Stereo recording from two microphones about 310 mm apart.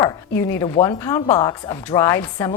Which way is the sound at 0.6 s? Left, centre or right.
Centre.